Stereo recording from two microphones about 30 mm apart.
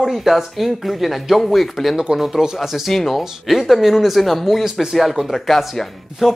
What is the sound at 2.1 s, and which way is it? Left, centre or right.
Speech, centre.